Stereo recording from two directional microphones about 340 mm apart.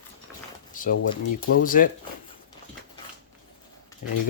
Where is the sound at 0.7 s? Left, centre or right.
Left.